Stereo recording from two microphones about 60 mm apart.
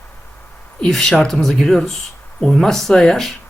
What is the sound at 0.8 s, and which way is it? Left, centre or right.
Speech, centre.